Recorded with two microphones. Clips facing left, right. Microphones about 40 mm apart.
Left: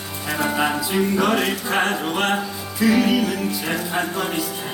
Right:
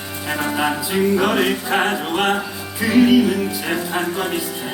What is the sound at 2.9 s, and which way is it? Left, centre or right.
Music, right.